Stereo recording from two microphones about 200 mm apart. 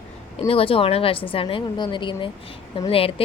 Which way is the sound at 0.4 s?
30° left (ahead or behind).